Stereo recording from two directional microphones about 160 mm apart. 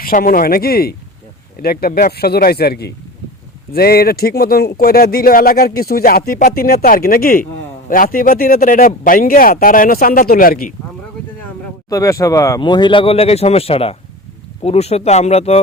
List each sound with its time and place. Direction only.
0.0 s speech: 65° left (ahead or behind); by 2.9 s 85° left
3.7 s speech: 75° left (ahead or behind)
11.9 s speech: 20° left (ahead or behind); by 15.6 s 40° left (ahead or behind)